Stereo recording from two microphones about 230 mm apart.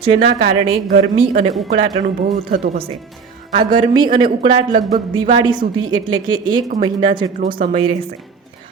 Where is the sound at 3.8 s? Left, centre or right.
Centre.